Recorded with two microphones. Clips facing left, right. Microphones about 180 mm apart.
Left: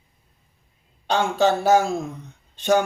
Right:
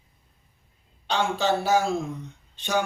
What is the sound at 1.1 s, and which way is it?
Speech, 50° left (ahead or behind).